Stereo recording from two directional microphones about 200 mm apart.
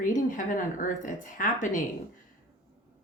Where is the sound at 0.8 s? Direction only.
40° left (ahead or behind).